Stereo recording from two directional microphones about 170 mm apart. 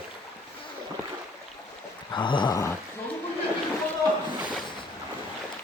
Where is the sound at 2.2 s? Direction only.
30° left (ahead or behind).